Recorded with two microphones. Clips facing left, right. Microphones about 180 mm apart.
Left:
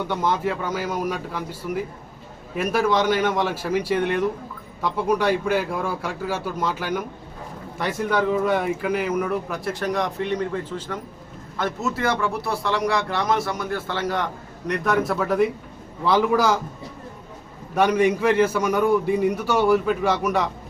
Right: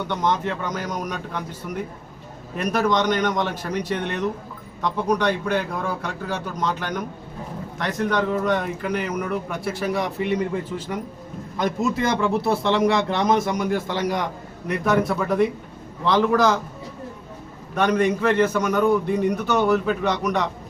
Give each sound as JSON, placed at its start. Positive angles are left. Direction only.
{"t": 0.1, "sound": "a man's voice", "side_deg": 5}
{"t": 14.7, "sound": "a man's voice", "side_deg": 0}
{"t": 17.7, "sound": "a man's voice", "side_deg": 10}